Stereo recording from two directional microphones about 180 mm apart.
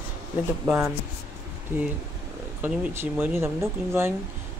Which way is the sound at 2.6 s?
10° right (ahead or behind).